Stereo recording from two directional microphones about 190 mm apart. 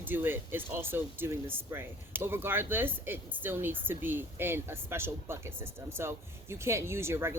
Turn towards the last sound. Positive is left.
turn(degrees=-15)  # may be behind; listen again after turning